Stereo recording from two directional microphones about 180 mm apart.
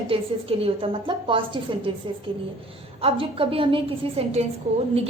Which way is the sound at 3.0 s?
30° right (ahead or behind).